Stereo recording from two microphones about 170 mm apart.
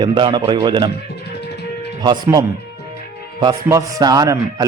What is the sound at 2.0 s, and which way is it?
Speech, 25° right (ahead or behind).